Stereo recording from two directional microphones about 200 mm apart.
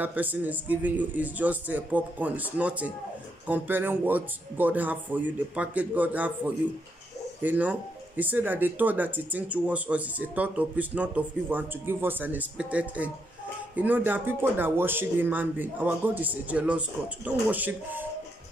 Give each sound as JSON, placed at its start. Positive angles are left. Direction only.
{"t": 0.0, "sound": "speech", "side_deg": -10}